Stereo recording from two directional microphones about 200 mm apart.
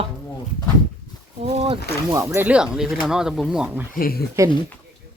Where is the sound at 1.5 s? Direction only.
30° right (ahead or behind).